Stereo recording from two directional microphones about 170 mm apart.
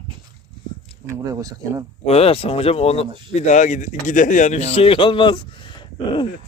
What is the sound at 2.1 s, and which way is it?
Speech, 35° left (ahead or behind).